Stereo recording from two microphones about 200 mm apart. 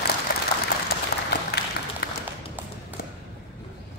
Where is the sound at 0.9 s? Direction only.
50° left (ahead or behind).